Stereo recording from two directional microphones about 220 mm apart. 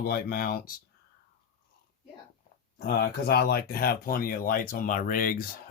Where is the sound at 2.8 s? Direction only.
45° left (ahead or behind).